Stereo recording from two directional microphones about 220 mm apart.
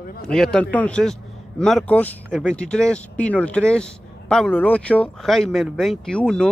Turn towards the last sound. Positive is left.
turn(degrees=5)  # may be behind; listen again after turning